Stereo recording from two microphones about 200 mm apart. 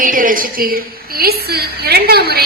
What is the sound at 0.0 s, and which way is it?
A woman's voice, 45° right (ahead or behind).